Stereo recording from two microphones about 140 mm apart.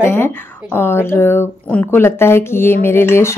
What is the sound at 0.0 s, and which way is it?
A woman's voice, 15° left (ahead or behind).